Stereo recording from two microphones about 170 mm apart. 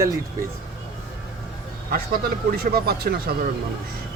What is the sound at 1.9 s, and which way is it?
Speech, 65° right (ahead or behind).